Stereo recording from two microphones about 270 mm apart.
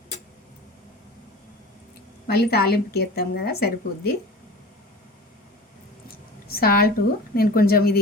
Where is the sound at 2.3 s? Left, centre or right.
Left.